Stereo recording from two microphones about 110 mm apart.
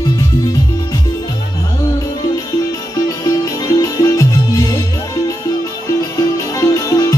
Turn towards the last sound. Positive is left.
turn(degrees=30)  # may be behind; listen again after turning